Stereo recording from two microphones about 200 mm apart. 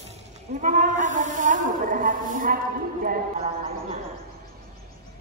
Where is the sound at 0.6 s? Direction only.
40° right (ahead or behind).